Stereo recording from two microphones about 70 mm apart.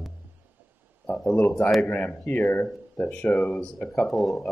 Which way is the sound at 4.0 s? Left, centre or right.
Centre.